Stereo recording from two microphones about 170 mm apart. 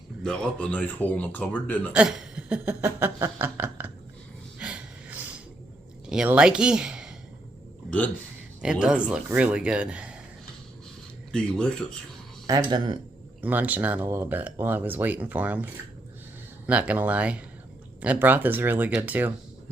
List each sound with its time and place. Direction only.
0.2 s speech: 5° left (ahead or behind)
1.9 s speech: 5° right (ahead or behind)
4.6 s snort: 5° right (ahead or behind)
6.1 s speech: 5° right (ahead or behind)
7.9 s a man's voice: 10° left (ahead or behind)
8.6 s speech: 5° right (ahead or behind)
11.3 s speech: 5° left (ahead or behind)
12.5 s speech: 25° right (ahead or behind)
13.4 s speech: 10° right (ahead or behind)